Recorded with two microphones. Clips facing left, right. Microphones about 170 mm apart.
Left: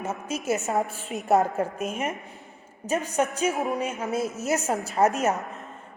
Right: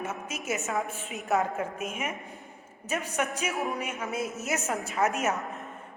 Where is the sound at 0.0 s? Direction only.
30° left (ahead or behind).